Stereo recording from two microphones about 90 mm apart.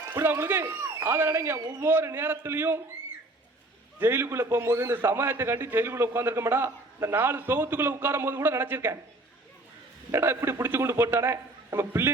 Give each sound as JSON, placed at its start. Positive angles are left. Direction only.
{"t": 0.1, "sound": "a man's voice", "side_deg": -25}
{"t": 4.0, "sound": "a man's voice", "side_deg": -25}
{"t": 10.1, "sound": "a man's voice", "side_deg": -30}